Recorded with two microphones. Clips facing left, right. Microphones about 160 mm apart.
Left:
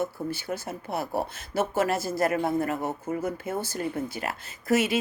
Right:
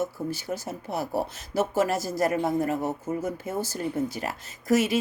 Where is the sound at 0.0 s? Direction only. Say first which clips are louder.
Even; 40° right (ahead or behind).